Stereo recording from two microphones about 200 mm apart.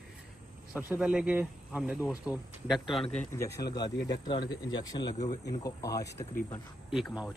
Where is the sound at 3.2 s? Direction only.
15° left (ahead or behind).